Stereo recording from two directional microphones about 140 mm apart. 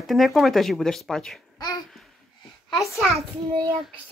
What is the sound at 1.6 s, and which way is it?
Babbling, 30° left (ahead or behind).